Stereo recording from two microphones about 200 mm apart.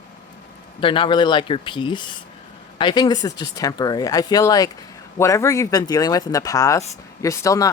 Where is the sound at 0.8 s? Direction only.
25° left (ahead or behind).